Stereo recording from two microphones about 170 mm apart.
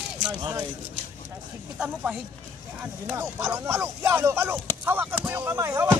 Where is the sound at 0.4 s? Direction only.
20° right (ahead or behind).